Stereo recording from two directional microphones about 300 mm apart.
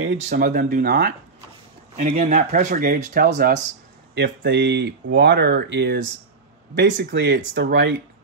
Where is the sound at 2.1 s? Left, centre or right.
Right.